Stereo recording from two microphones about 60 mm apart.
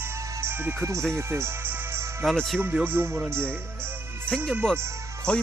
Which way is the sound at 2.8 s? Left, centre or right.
Right.